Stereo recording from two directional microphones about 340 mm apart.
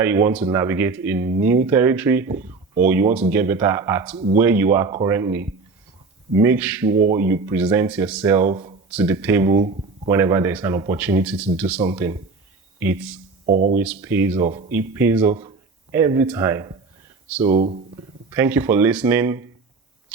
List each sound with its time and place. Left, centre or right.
0.0 s speech: centre
13.4 s speech: right
13.7 s speech: centre
17.6 s speech: centre
18.3 s speech: centre